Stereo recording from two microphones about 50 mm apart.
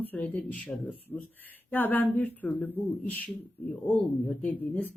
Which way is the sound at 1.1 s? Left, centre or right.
Left.